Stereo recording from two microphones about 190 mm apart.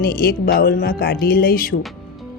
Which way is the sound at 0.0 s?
50° left (ahead or behind).